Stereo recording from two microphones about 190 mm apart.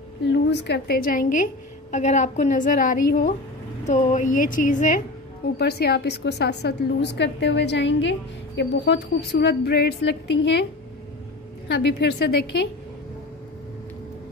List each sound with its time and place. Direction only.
0.3 s a woman's voice: 65° left (ahead or behind); by 5.0 s 45° left (ahead or behind)
5.6 s a woman's voice: 60° left (ahead or behind)